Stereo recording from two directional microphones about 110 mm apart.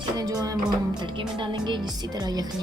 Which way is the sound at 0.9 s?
45° right (ahead or behind).